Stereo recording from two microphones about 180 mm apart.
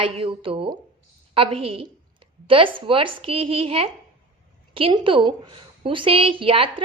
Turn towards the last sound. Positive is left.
turn(degrees=-30)  # may be behind; listen again after turning